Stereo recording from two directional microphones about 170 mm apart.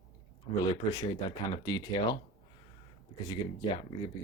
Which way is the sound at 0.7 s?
25° left (ahead or behind).